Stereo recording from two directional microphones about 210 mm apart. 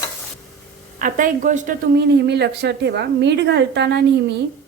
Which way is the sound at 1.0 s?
35° right (ahead or behind).